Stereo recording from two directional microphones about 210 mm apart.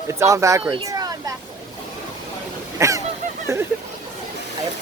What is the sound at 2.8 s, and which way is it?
Goose, 15° right (ahead or behind).